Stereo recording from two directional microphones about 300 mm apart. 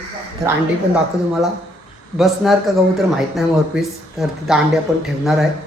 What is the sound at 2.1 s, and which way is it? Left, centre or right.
Speech, centre.